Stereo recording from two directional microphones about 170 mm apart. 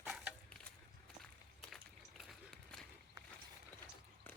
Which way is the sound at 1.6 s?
Centre (ahead or behind).